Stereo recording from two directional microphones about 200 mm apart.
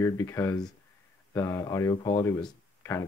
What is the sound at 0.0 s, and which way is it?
Speech, 15° left (ahead or behind).